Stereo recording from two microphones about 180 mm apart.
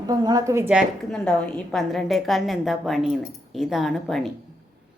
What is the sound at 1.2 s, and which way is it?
A woman's voice, centre (ahead or behind).